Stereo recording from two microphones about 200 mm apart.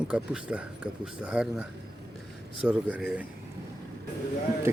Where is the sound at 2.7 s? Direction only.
5° right (ahead or behind).